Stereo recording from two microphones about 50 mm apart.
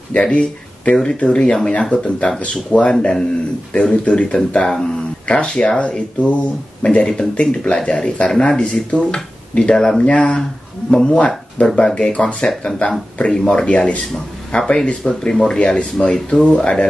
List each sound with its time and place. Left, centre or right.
0.1 s speech: left
13.7 s speech: left
14.0 s speech: centre
15.4 s speech: centre